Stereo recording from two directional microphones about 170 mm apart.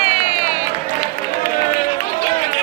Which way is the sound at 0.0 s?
35° left (ahead or behind).